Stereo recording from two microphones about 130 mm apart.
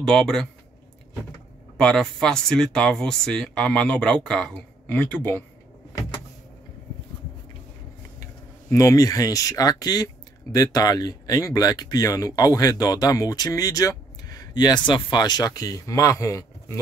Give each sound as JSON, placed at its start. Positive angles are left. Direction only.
{"t": 0.0, "sound": "speech", "side_deg": 5}
{"t": 1.8, "sound": "speech", "side_deg": 5}
{"t": 8.6, "sound": "speech", "side_deg": 25}